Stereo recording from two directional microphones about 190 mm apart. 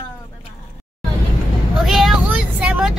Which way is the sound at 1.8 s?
Centre (ahead or behind).